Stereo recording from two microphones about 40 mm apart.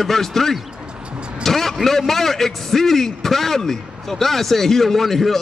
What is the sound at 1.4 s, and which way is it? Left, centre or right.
Vehicle, centre.